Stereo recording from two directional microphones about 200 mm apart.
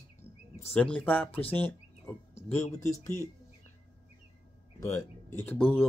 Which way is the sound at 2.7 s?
40° left (ahead or behind).